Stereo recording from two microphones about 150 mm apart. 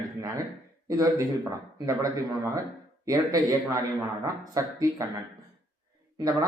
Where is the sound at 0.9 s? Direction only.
20° right (ahead or behind).